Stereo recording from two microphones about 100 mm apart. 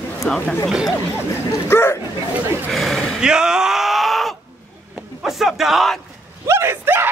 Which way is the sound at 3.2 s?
10° right (ahead or behind).